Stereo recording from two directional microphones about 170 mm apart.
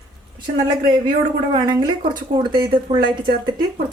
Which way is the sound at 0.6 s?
25° right (ahead or behind).